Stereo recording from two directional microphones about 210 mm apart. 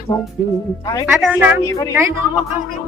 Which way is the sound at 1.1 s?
5° right (ahead or behind).